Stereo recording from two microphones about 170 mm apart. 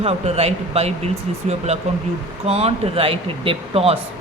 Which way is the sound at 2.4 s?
35° right (ahead or behind).